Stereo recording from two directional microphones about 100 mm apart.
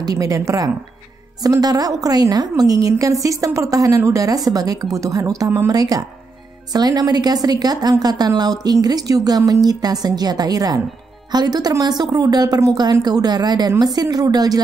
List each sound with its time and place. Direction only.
0.0 s a woman's voice: 35° right (ahead or behind)